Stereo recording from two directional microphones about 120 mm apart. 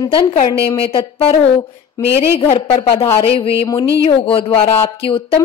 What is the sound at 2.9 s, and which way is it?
Speech, 25° left (ahead or behind).